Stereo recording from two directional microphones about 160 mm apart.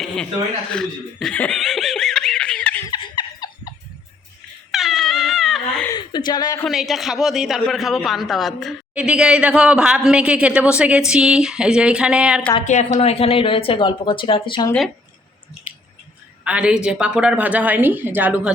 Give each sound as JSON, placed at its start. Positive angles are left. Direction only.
{"t": 0.7, "sound": "laughter", "side_deg": 5}
{"t": 2.9, "sound": "a sound", "side_deg": 30}
{"t": 4.7, "sound": "crying", "side_deg": 0}
{"t": 5.9, "sound": "a sound", "side_deg": 25}
{"t": 6.7, "sound": "a man's voice", "side_deg": 0}
{"t": 12.6, "sound": "speech", "side_deg": 45}
{"t": 16.4, "sound": "a woman's voice", "side_deg": -5}